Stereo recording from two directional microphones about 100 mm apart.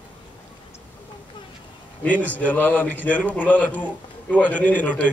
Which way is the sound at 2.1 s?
15° left (ahead or behind).